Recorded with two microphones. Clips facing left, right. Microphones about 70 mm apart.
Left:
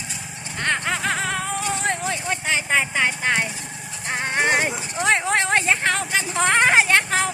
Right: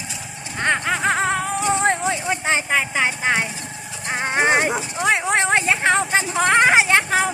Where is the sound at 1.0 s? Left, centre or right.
Right.